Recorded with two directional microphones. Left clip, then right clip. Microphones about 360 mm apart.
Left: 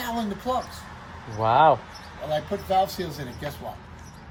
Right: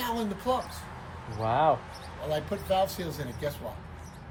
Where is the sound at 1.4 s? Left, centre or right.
Left.